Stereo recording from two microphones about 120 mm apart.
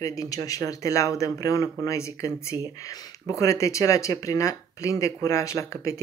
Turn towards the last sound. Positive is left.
turn(degrees=25)  # may be behind; listen again after turning